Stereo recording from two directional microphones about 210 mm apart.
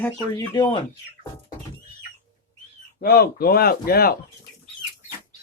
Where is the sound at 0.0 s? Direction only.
15° left (ahead or behind).